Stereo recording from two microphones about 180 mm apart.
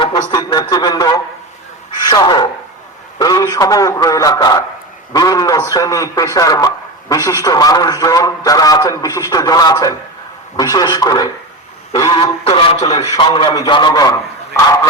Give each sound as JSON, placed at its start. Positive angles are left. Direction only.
{"t": 0.0, "sound": "a man's voice", "side_deg": 25}